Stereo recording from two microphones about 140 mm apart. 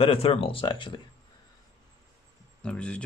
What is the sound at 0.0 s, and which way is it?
Speech, 40° left (ahead or behind).